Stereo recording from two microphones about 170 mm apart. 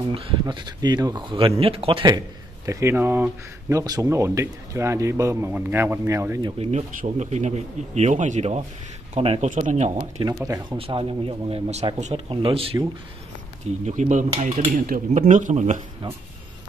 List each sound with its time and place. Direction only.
0.1 s speech: 30° right (ahead or behind)
6.6 s speech: 45° right (ahead or behind)
10.2 s speech: 20° right (ahead or behind)
10.8 s speech: 30° right (ahead or behind)
13.8 s speech: 45° right (ahead or behind)